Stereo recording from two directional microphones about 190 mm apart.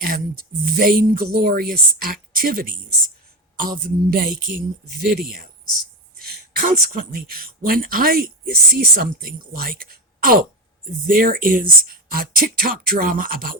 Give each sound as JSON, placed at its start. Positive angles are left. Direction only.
{"t": 0.6, "sound": "speech", "side_deg": -50}
{"t": 6.2, "sound": "speech", "side_deg": -50}